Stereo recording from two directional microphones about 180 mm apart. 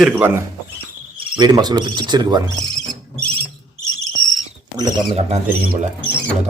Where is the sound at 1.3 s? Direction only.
20° right (ahead or behind).